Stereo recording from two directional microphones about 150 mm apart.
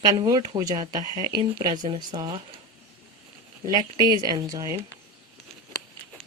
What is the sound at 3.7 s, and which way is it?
Speech, 25° right (ahead or behind).